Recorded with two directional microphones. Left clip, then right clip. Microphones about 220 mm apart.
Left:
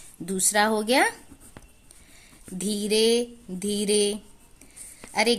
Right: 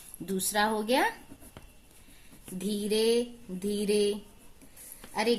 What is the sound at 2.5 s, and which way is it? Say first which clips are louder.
Speech: left 5 dB; 45° left (ahead or behind).